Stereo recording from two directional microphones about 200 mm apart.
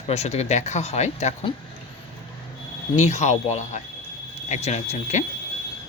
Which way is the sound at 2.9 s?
35° left (ahead or behind).